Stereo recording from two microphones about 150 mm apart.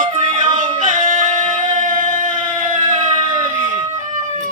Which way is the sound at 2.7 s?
55° right (ahead or behind).